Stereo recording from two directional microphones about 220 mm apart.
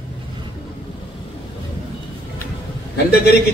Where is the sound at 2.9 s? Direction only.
45° left (ahead or behind).